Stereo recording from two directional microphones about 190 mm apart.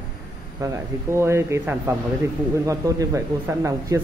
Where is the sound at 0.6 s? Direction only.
15° right (ahead or behind).